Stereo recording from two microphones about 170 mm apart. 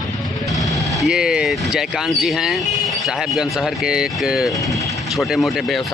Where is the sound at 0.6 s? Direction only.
Centre (ahead or behind).